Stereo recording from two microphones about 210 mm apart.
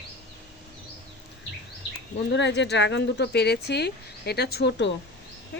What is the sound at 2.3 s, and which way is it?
A woman's voice, 55° left (ahead or behind).